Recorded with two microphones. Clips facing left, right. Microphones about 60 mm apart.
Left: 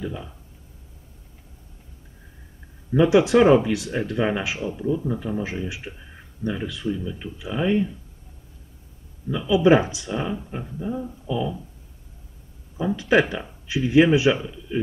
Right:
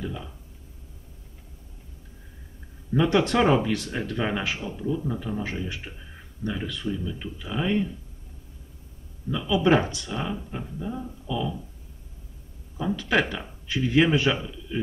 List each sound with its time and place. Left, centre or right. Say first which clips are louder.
0.0 s speech: left 3 dB; centre
2.9 s speech: left 5 dB; centre
9.3 s speech: left 4 dB; centre
12.7 s a man's voice: left 5 dB; centre